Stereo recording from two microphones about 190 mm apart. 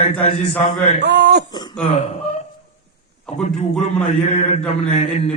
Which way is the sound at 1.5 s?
20° left (ahead or behind).